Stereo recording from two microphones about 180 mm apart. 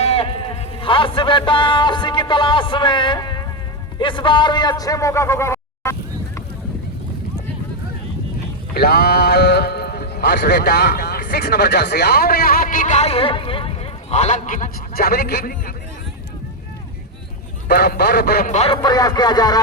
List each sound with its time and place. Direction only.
0.0 s a man's voice: 35° left (ahead or behind); by 6.4 s 15° left (ahead or behind)
8.7 s a man's voice: 60° left (ahead or behind)
17.7 s speech: 60° left (ahead or behind)
18.4 s speech: 35° left (ahead or behind)
18.8 s speech: 20° left (ahead or behind)